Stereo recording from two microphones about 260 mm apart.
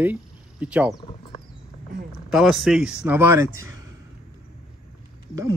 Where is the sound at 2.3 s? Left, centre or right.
Centre.